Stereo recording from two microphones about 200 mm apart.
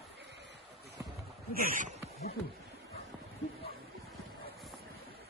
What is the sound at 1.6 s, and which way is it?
Speech, 45° right (ahead or behind).